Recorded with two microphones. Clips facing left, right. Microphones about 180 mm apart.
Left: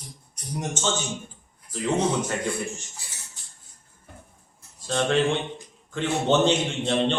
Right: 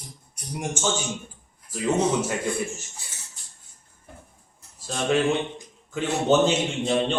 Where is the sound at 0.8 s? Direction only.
10° right (ahead or behind).